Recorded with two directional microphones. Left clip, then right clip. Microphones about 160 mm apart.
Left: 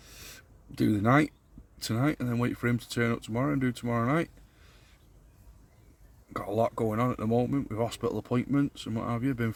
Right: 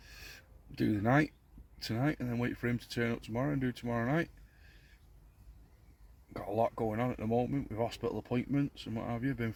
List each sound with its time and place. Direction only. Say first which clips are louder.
0.0 s a sound: left 3 dB; 20° left (ahead or behind)
0.8 s speech: left 5 dB; 20° left (ahead or behind)
6.3 s speech: left 4 dB; 20° left (ahead or behind)